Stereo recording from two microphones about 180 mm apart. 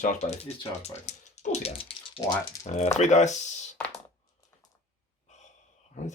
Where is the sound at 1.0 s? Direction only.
40° left (ahead or behind); by 2.6 s 20° left (ahead or behind).